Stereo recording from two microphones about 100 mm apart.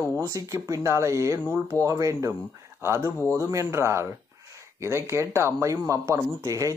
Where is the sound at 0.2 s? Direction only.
35° right (ahead or behind).